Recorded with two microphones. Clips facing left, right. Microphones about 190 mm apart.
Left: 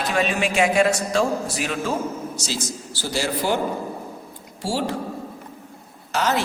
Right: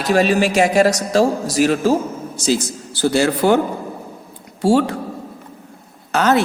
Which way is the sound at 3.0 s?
60° right (ahead or behind).